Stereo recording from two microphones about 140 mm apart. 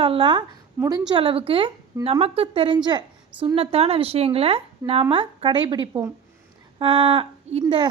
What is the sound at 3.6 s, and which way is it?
A woman's voice, 45° right (ahead or behind).